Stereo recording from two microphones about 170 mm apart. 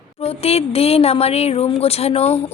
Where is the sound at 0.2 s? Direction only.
35° left (ahead or behind).